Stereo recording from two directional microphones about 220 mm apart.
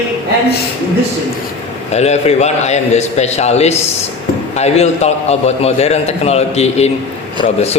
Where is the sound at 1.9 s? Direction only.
30° left (ahead or behind).